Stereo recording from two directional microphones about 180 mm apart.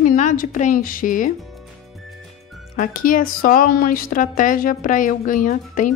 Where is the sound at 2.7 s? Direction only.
50° left (ahead or behind).